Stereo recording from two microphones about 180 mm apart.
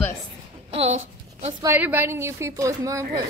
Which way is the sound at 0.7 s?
35° right (ahead or behind).